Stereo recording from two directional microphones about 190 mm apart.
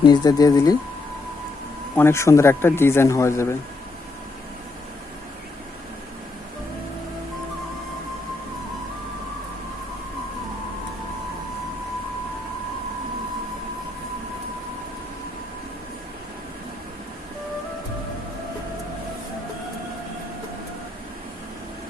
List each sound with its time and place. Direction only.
0.0 s speech: 20° left (ahead or behind)
2.0 s speech: 15° left (ahead or behind)